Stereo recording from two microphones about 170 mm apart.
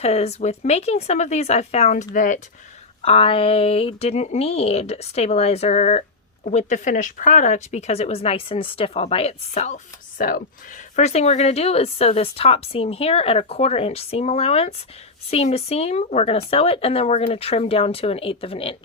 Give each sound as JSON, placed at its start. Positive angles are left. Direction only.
{"t": 0.0, "sound": "speech", "side_deg": 40}
{"t": 3.0, "sound": "speech", "side_deg": 35}
{"t": 10.9, "sound": "speech", "side_deg": 40}